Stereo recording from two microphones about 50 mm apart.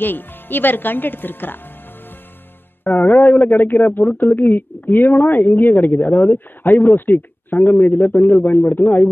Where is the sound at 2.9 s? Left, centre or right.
Left.